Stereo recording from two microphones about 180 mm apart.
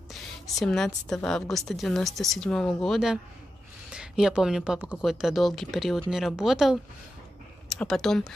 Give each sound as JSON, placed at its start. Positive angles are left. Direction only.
{"t": 0.1, "sound": "a woman's voice", "side_deg": 0}